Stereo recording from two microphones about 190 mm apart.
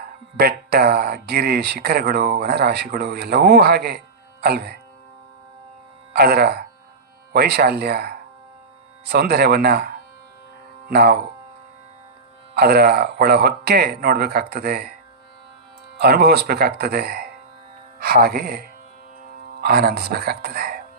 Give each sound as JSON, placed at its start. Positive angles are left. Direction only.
{"t": 0.3, "sound": "speech", "side_deg": -55}
{"t": 6.1, "sound": "speech", "side_deg": -55}
{"t": 12.5, "sound": "speech", "side_deg": -55}
{"t": 16.0, "sound": "speech", "side_deg": -55}